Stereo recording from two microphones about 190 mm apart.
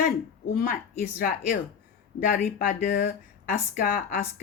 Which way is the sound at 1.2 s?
50° left (ahead or behind).